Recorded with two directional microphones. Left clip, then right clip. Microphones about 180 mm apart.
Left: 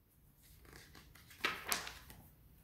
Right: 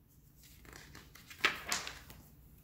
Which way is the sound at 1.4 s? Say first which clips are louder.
Right 5 dB; 15° left (ahead or behind).